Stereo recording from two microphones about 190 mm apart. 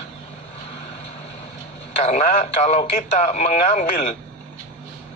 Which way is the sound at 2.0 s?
35° left (ahead or behind).